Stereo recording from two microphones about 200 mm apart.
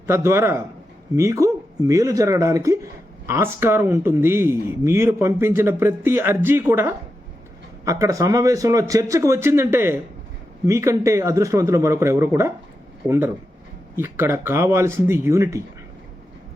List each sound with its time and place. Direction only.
0.1 s speech: 15° right (ahead or behind)